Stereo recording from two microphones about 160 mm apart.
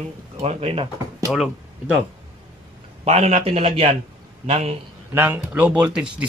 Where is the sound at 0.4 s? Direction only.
40° right (ahead or behind).